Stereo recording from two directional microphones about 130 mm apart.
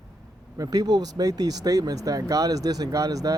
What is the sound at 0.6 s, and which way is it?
Speech, 30° right (ahead or behind).